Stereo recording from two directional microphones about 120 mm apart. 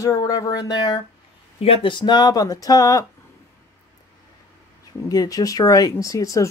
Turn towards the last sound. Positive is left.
turn(degrees=30)  # may be behind; listen again after turning